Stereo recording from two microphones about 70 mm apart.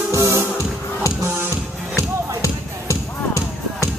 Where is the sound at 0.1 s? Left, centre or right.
Right.